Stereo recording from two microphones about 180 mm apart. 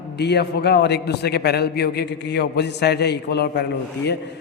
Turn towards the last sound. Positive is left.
turn(degrees=70)  # may be behind; listen again after turning